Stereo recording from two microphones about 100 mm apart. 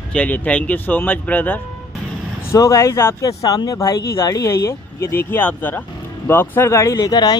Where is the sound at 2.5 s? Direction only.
30° left (ahead or behind).